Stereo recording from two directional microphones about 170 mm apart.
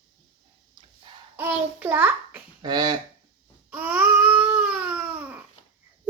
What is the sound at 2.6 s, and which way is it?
Speech, 25° right (ahead or behind).